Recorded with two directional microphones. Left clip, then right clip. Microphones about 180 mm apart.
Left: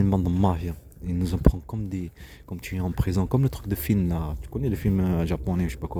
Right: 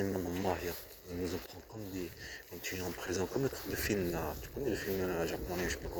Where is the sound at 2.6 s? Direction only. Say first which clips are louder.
Left 7 dB; 30° left (ahead or behind).